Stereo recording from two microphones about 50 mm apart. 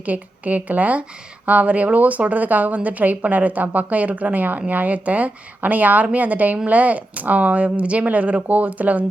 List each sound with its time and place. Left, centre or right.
0.0 s speech: right